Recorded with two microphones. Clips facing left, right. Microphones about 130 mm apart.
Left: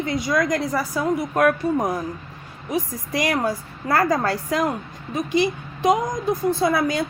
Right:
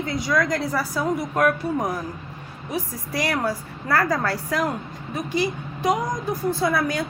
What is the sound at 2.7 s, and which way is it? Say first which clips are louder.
A woman's voice: left 3 dB; 20° left (ahead or behind).